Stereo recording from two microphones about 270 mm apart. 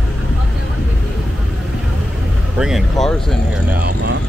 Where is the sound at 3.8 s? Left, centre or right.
Right.